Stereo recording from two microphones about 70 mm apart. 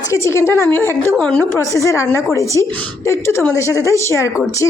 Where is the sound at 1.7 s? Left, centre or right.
Left.